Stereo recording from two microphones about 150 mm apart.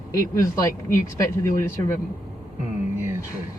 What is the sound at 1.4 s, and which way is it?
Speech, 15° left (ahead or behind).